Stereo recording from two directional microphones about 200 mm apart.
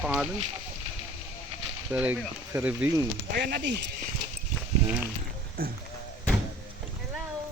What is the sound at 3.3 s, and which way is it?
Speech, 55° right (ahead or behind).